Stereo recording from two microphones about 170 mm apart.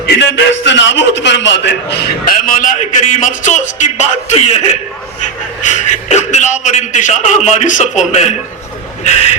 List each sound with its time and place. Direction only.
0.0 s a man's voice: 90° left
2.5 s a man's voice: 50° left (ahead or behind)